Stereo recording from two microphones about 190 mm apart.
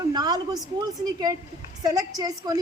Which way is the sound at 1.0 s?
20° right (ahead or behind).